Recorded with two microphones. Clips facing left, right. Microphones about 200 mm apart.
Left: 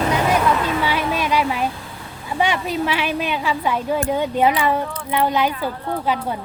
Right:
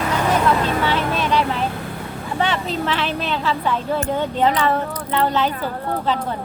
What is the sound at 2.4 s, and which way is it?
Speech, 10° left (ahead or behind).